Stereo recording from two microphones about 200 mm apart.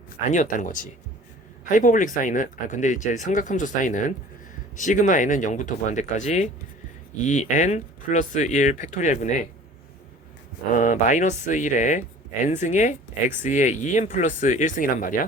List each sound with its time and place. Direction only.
0.3 s speech: 40° left (ahead or behind)
10.8 s speech: 40° left (ahead or behind)